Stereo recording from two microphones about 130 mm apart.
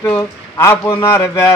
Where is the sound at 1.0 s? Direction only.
20° left (ahead or behind).